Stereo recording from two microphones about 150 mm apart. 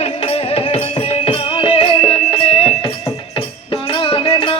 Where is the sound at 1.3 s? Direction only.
35° left (ahead or behind).